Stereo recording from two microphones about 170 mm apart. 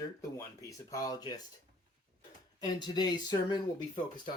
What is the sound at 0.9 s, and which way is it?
Speech, 20° left (ahead or behind).